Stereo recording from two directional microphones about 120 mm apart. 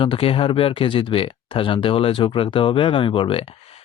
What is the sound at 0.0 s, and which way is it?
Speech, 50° left (ahead or behind).